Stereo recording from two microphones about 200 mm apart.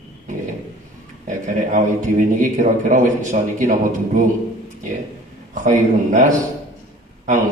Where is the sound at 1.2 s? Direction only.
40° right (ahead or behind).